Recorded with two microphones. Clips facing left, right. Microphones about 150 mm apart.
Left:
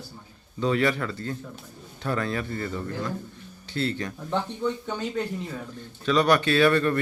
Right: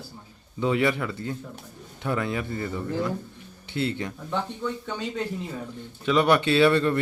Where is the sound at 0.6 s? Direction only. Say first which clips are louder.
Even; 20° right (ahead or behind).